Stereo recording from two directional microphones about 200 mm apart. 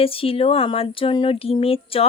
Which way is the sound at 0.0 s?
30° left (ahead or behind).